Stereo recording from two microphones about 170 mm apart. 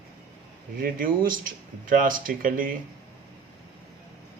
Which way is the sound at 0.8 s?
55° right (ahead or behind).